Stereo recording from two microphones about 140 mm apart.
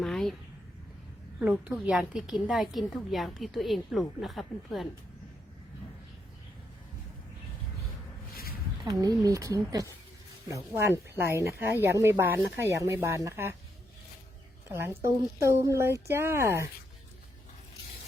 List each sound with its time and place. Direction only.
0.0 s a sound: centre (ahead or behind)
1.4 s a woman's voice: 10° right (ahead or behind)
8.8 s speech: 25° right (ahead or behind)
14.7 s speech: 15° right (ahead or behind)